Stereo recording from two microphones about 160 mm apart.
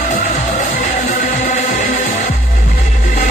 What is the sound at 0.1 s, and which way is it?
Music, 55° left (ahead or behind).